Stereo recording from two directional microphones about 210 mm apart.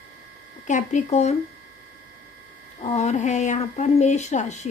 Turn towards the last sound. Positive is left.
turn(degrees=35)  # may be behind; listen again after turning